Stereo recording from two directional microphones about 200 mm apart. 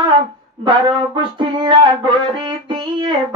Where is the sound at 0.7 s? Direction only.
25° right (ahead or behind).